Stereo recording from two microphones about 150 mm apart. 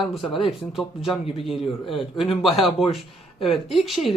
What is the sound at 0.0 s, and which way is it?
Speech, centre (ahead or behind).